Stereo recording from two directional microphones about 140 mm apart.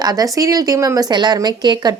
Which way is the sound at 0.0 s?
25° right (ahead or behind).